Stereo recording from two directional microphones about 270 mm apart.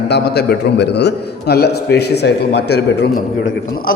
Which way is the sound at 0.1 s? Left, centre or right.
Left.